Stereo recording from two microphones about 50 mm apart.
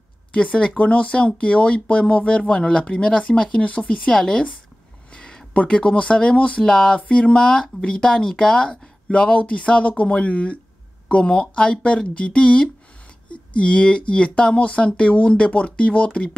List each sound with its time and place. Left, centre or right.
0.3 s speech: left
4.1 s a woman's voice: centre
5.1 s a sound: centre
5.6 s speech: left